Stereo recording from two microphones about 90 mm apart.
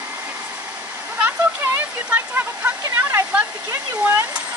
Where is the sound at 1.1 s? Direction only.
20° right (ahead or behind).